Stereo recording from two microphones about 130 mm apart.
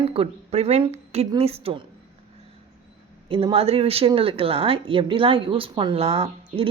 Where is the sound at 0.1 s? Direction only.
50° right (ahead or behind).